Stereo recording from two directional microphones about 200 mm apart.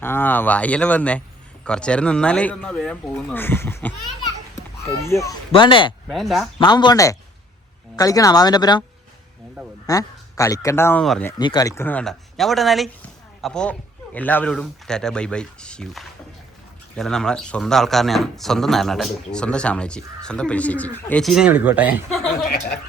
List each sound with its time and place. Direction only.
0.0 s speech: 10° left (ahead or behind)
5.0 s speech: 15° left (ahead or behind)
6.1 s speech: centre (ahead or behind)
6.6 s speech: 20° left (ahead or behind)
9.8 s speech: 15° left (ahead or behind)
11.0 s speech: centre (ahead or behind)
11.3 s speech: 20° left (ahead or behind); by 22.4 s centre (ahead or behind)
22.4 s speech: 55° left (ahead or behind)